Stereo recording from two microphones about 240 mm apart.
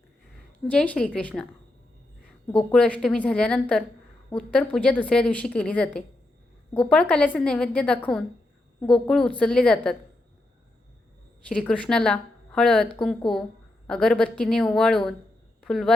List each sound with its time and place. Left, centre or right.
0.7 s speech: centre
2.5 s speech: centre
11.4 s speech: centre